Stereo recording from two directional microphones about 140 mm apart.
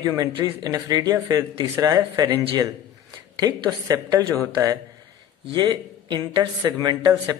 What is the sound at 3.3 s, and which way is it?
Speech, 25° right (ahead or behind).